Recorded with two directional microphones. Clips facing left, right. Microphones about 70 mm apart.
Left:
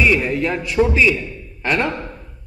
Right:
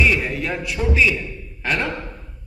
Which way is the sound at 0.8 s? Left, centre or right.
Left.